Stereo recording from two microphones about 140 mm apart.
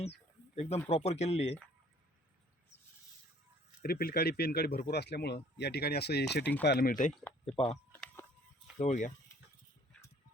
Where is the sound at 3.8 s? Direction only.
90° left.